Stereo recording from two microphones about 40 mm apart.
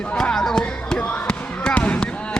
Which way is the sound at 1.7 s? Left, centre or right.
Left.